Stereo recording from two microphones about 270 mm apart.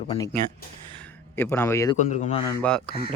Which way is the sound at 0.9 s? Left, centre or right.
Centre.